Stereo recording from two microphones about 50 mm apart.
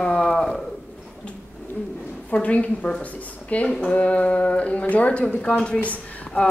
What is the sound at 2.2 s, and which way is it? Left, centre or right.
A woman's voice, left.